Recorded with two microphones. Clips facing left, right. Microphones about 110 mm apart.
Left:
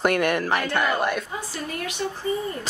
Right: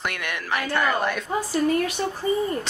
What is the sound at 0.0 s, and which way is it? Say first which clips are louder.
Speech: left 9 dB; 45° left (ahead or behind).